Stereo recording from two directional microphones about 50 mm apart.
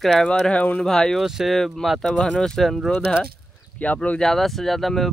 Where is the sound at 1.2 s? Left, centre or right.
Centre.